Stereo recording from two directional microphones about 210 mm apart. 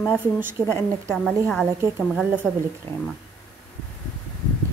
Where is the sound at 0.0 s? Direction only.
10° right (ahead or behind).